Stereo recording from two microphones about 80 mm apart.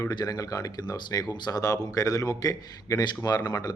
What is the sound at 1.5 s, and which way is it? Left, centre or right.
Speech, left.